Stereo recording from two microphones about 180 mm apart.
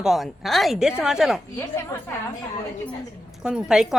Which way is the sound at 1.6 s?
15° left (ahead or behind).